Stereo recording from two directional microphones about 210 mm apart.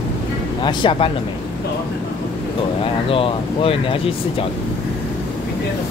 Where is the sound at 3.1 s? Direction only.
25° left (ahead or behind).